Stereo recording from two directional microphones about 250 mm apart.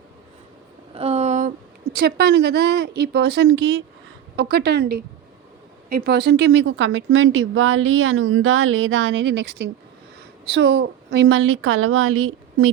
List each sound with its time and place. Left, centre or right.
0.9 s a woman's voice: right